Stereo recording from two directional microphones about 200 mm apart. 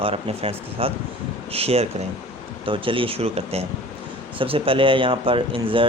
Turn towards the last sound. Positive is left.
turn(degrees=-25)  # may be behind; listen again after turning